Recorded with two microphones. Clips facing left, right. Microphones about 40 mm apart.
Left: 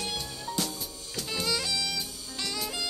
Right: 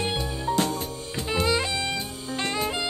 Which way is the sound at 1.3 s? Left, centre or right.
Right.